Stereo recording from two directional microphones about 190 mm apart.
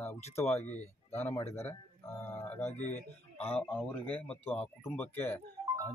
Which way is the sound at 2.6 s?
35° left (ahead or behind).